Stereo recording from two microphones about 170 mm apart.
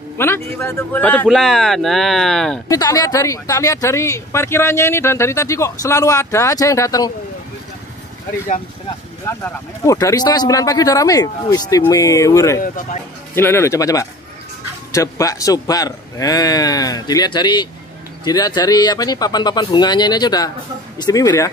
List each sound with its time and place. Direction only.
0.2 s a man's voice: 15° left (ahead or behind)
2.7 s speech: 20° left (ahead or behind)
9.2 s a man's voice: 15° left (ahead or behind)
12.6 s speech: 50° left (ahead or behind)
13.3 s a man's voice: 15° left (ahead or behind)